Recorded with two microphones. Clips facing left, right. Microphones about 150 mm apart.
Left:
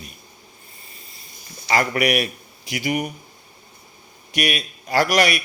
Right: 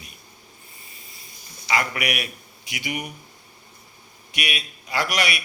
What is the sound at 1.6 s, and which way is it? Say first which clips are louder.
A man's voice: left 5 dB; 40° left (ahead or behind).